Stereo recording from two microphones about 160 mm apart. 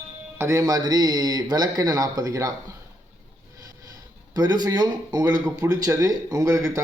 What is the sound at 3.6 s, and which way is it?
Speech, 25° right (ahead or behind).